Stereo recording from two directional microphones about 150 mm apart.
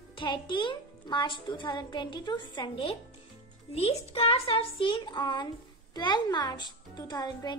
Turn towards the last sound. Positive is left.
turn(degrees=30)  # may be behind; listen again after turning